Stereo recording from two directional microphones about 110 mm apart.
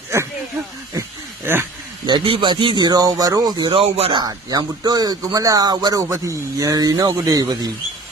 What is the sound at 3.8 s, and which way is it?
Speech, 65° right (ahead or behind).